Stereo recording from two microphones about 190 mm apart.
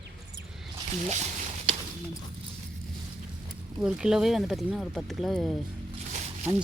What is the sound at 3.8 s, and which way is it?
Speech, 5° right (ahead or behind).